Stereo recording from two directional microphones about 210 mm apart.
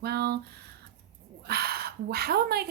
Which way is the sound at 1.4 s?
50° right (ahead or behind).